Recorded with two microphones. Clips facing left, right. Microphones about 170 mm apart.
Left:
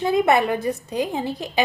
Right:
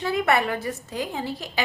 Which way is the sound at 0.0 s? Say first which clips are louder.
Left 4 dB; 20° left (ahead or behind).